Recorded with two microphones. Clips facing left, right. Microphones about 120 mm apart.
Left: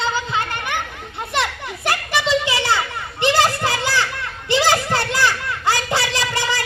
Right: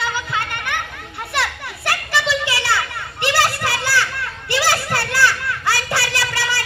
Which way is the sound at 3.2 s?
20° left (ahead or behind).